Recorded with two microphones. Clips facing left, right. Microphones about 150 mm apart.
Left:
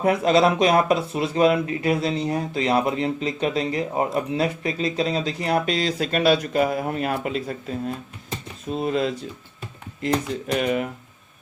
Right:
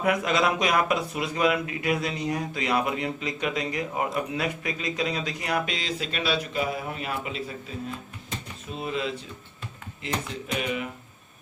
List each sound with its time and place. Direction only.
0.0 s speech: 30° left (ahead or behind)
10.6 s speech: 45° left (ahead or behind)